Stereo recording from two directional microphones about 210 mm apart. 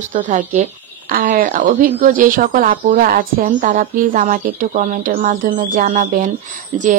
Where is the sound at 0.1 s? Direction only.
35° right (ahead or behind).